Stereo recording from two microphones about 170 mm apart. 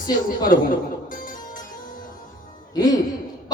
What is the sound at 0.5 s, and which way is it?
Speech, 50° left (ahead or behind).